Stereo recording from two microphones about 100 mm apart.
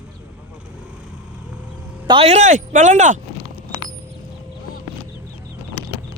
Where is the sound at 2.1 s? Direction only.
45° right (ahead or behind).